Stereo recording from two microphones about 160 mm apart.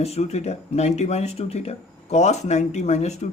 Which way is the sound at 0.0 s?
40° left (ahead or behind).